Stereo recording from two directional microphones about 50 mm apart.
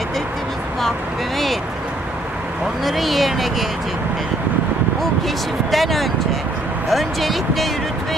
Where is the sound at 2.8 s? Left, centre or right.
Centre.